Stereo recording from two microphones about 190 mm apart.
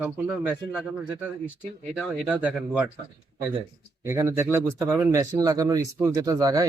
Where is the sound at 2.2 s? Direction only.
10° right (ahead or behind).